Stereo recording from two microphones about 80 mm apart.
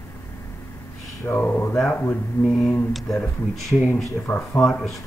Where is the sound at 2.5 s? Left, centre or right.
Centre.